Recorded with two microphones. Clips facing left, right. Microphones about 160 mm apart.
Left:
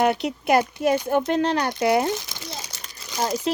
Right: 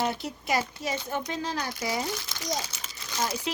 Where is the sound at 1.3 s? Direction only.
65° left (ahead or behind).